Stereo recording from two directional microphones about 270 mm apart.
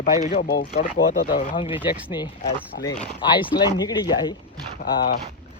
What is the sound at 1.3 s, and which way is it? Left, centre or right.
Speech, centre.